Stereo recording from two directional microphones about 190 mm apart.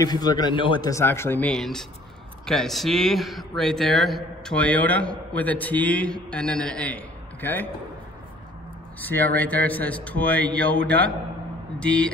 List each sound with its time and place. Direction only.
0.0 s a man's voice: 20° left (ahead or behind)
9.0 s a man's voice: 10° left (ahead or behind)
11.8 s a man's voice: 5° left (ahead or behind)